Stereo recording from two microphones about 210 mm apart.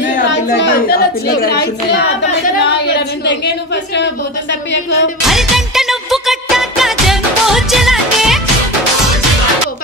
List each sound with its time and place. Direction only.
0.7 s a woman's voice: 45° left (ahead or behind)
2.6 s singing: 55° left (ahead or behind)
5.2 s music: centre (ahead or behind)